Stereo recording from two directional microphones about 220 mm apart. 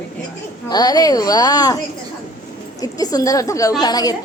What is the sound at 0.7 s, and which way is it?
A woman's voice, 15° left (ahead or behind).